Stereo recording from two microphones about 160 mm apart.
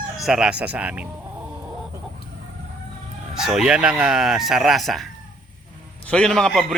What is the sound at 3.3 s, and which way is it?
Speech, 5° right (ahead or behind).